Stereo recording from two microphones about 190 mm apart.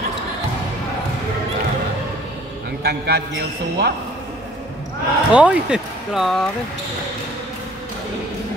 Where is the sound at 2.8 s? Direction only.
60° right (ahead or behind).